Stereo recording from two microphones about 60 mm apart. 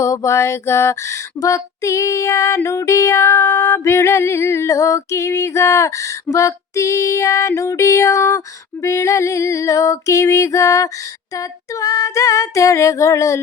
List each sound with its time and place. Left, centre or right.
0.0 s music: left
1.4 s female singing: left
2.6 s music: left
6.3 s female singing: left